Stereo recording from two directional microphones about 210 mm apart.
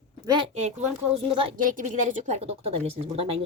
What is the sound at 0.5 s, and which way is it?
A woman's voice, 35° right (ahead or behind).